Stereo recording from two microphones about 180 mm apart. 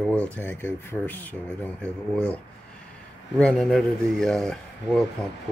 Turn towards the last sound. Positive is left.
turn(degrees=5)  # may be behind; listen again after turning